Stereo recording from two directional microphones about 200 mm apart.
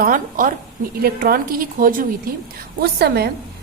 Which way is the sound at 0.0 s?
40° right (ahead or behind).